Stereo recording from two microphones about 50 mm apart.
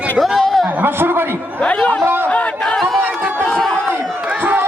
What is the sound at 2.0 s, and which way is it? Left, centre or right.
Speech, right.